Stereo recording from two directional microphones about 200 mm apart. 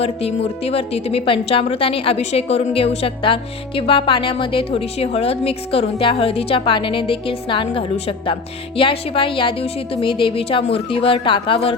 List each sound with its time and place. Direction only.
0.0 s speech: 30° left (ahead or behind)